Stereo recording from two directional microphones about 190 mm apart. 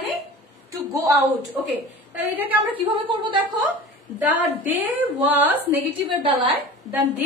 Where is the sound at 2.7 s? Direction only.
25° right (ahead or behind).